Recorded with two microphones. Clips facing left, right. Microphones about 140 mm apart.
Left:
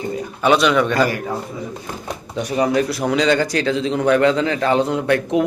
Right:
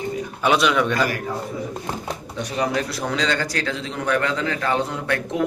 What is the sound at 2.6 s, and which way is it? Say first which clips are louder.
A man's voice: left 6 dB; 10° left (ahead or behind).